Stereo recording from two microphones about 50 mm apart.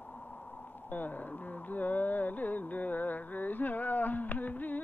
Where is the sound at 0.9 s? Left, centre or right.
Left.